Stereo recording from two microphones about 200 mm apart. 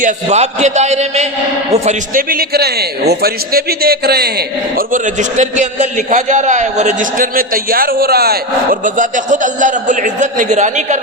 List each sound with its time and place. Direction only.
0.0 s a man's voice: 35° right (ahead or behind); by 4.4 s 50° right (ahead or behind)
4.9 s a man's voice: 40° right (ahead or behind)